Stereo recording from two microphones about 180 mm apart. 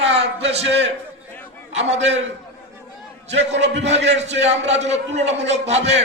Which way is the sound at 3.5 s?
80° right.